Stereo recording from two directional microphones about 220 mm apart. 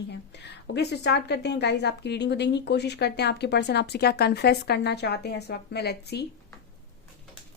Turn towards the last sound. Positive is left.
turn(degrees=50)  # may be behind; listen again after turning